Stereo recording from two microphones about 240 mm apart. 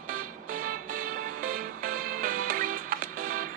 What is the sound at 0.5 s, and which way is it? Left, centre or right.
Music, right.